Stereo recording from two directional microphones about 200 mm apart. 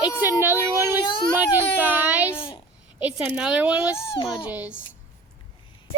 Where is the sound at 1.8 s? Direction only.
10° right (ahead or behind).